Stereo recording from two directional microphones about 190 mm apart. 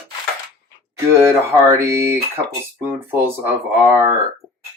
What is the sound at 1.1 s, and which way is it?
Mantra, 15° right (ahead or behind).